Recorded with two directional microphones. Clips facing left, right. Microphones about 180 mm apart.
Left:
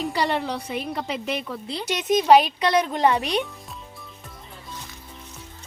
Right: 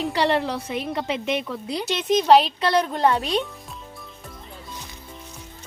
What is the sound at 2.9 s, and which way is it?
Speech, 15° left (ahead or behind).